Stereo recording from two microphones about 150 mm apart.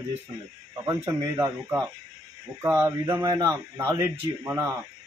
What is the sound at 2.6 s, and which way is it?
Speech, 10° right (ahead or behind).